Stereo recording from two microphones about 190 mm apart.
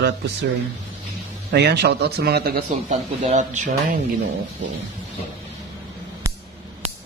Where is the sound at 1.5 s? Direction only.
60° right (ahead or behind).